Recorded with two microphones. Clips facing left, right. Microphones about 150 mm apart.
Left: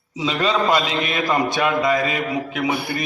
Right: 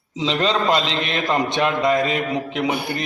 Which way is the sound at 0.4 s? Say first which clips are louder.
Left 1 dB; 25° right (ahead or behind).